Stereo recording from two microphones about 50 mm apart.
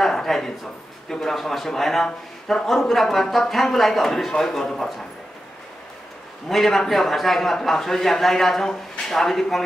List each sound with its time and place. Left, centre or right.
0.0 s a sound: centre
1.1 s a man's voice: centre
6.5 s a man's voice: centre